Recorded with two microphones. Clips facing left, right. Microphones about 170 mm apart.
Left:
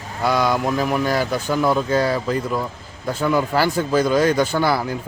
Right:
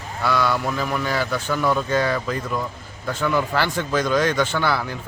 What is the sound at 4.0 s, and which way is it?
Speech, 10° left (ahead or behind).